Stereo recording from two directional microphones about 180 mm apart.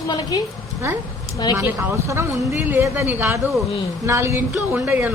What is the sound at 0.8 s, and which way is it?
Speech, 15° right (ahead or behind).